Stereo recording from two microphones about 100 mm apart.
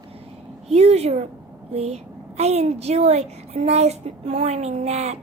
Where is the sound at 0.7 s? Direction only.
90° right.